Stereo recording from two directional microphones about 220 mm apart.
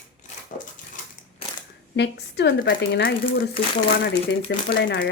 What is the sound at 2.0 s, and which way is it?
Speech, 50° left (ahead or behind).